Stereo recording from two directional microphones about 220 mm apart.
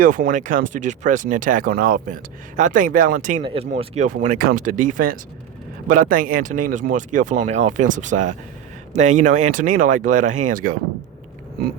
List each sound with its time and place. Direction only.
0.0 s speech: 35° right (ahead or behind)
3.4 s speech: 25° right (ahead or behind)